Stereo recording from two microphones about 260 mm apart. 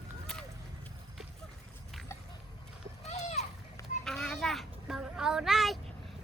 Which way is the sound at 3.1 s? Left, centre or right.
Left.